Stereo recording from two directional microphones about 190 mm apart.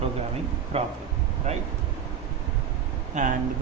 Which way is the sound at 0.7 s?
35° right (ahead or behind).